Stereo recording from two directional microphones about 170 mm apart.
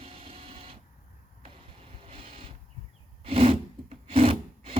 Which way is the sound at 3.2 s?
35° right (ahead or behind).